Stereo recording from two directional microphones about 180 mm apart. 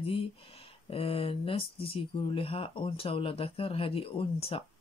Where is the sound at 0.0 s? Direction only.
30° left (ahead or behind).